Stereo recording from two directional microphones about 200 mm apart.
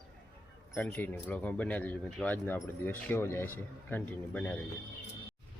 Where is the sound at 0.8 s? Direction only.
10° left (ahead or behind).